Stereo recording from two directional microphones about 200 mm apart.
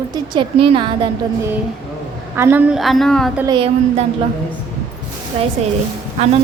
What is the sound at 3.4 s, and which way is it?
Speech, 25° right (ahead or behind).